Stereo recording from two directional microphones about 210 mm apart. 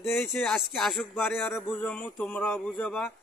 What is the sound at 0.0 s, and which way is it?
Speech, 10° left (ahead or behind).